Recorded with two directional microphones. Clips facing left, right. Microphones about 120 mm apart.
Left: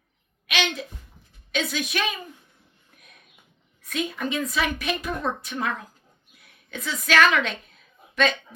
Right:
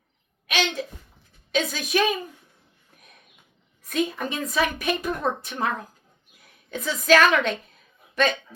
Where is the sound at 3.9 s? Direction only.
40° right (ahead or behind).